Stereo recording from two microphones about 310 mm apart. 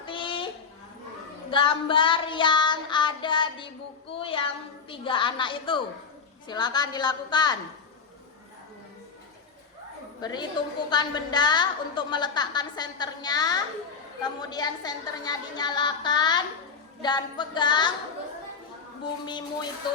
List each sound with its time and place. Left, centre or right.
0.0 s a sound: centre
1.5 s child singing: centre
4.1 s a sound: centre
4.9 s a woman's voice: centre
10.2 s a woman's voice: centre
19.2 s a woman's voice: centre